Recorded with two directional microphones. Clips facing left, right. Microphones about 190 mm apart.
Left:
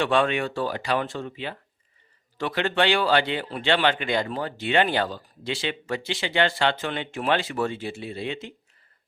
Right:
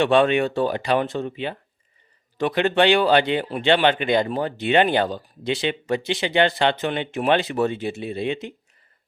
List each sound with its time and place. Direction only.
0.0 s speech: 20° right (ahead or behind)